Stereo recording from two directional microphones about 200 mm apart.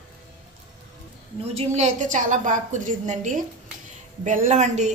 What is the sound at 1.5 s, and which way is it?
A woman's voice, 35° right (ahead or behind).